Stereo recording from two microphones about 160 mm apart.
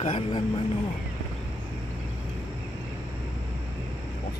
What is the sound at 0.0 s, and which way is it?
Speech, 35° left (ahead or behind).